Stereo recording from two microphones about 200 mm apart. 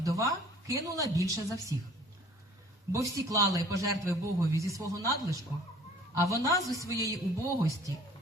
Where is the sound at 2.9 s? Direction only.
15° right (ahead or behind).